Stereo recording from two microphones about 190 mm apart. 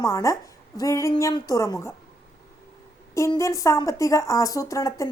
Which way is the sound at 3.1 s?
15° left (ahead or behind).